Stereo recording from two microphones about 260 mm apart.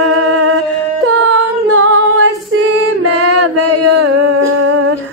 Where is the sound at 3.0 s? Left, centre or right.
Right.